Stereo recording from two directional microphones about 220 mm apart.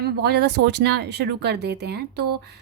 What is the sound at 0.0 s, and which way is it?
A woman's voice, 45° right (ahead or behind).